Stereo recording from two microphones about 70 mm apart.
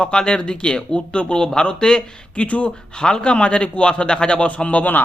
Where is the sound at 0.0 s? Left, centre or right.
Centre.